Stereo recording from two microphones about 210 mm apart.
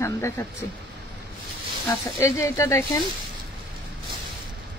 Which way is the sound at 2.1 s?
15° left (ahead or behind).